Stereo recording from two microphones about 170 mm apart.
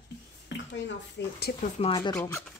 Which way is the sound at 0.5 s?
90° left.